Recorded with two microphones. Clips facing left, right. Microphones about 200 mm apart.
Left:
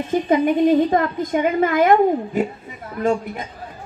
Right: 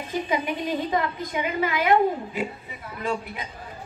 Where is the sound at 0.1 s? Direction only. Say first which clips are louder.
Left 10 dB; 50° left (ahead or behind).